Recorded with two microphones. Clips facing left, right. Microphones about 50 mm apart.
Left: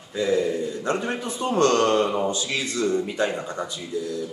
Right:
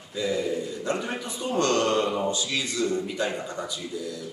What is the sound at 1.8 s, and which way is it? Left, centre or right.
Mantra, centre.